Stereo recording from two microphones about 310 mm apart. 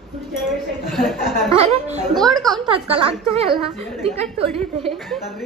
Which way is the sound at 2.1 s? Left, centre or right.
Centre.